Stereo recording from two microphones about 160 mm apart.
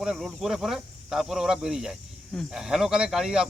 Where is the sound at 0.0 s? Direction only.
5° right (ahead or behind).